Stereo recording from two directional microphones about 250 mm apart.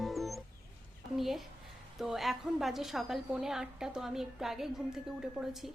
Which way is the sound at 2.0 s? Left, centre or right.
Centre.